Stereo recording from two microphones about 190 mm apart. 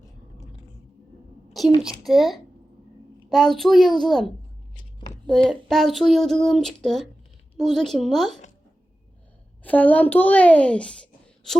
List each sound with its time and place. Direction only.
1.8 s speech: centre (ahead or behind)
4.7 s a sound: 25° left (ahead or behind)
5.2 s speech: centre (ahead or behind)
9.6 s a child's voice: 10° left (ahead or behind)